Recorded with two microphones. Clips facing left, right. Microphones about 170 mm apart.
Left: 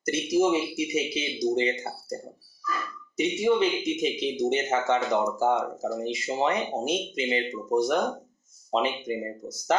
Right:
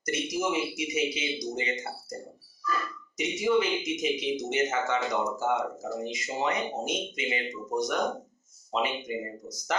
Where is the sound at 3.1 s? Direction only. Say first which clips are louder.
Left 3 dB; 30° left (ahead or behind).